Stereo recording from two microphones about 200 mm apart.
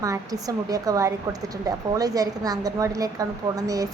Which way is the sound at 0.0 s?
15° right (ahead or behind).